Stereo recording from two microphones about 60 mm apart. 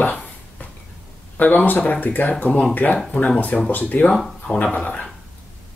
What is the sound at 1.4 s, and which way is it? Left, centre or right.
Speech, left.